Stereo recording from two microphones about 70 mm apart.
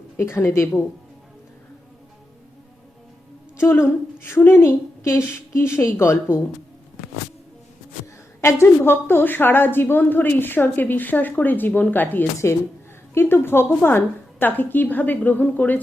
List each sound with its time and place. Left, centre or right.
0.2 s a woman's voice: left
3.6 s a woman's voice: left
8.4 s a woman's voice: left
12.5 s a woman's voice: left